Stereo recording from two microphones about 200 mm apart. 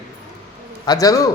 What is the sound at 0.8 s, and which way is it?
Speech, 20° left (ahead or behind).